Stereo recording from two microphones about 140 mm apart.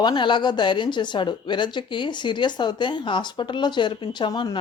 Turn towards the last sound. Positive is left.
turn(degrees=30)  # may be behind; listen again after turning